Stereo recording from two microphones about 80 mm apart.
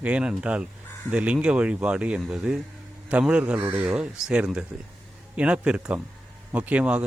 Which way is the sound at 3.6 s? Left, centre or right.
Right.